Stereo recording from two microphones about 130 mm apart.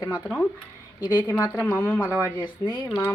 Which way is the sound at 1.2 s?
15° left (ahead or behind).